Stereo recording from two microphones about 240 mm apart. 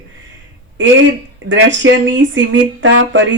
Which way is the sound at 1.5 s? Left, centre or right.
Right.